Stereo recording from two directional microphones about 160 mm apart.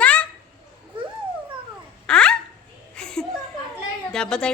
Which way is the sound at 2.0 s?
5° left (ahead or behind).